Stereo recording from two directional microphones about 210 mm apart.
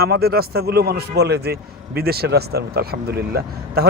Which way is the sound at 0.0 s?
45° right (ahead or behind).